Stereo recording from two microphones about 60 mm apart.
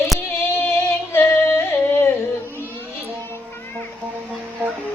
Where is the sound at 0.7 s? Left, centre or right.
Left.